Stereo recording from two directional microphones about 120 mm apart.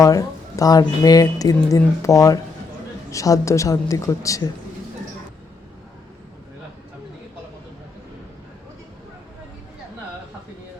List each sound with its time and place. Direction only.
0.0 s speech: 30° left (ahead or behind)